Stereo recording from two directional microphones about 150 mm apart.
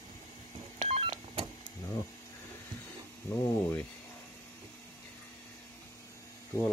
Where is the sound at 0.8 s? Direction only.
40° right (ahead or behind).